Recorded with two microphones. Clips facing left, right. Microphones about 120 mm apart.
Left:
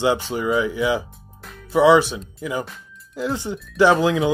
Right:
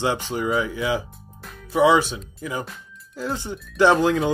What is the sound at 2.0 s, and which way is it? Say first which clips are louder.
Speech: left 3 dB; 15° left (ahead or behind).